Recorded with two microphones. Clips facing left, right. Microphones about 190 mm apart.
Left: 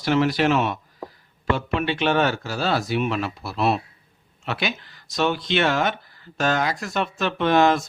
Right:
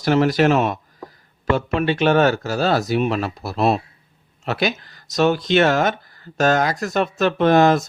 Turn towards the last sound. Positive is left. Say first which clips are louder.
# right 4 dB
turn(degrees=-40)  # may be behind; listen again after turning